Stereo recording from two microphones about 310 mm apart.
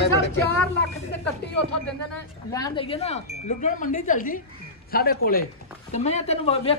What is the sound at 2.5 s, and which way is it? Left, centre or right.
A woman's voice, centre.